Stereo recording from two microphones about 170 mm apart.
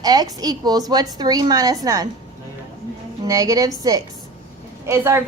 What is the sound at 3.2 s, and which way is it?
Speech, 20° right (ahead or behind).